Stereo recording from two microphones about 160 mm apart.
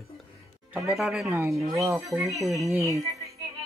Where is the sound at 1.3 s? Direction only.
15° right (ahead or behind).